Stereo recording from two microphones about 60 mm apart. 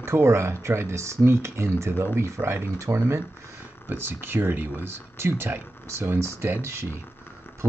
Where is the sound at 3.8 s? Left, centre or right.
Right.